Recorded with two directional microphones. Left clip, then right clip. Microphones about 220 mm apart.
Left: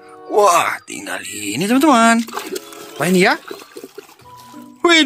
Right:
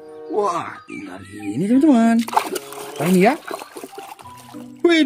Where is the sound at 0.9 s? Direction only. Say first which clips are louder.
Left 8 dB; 40° left (ahead or behind).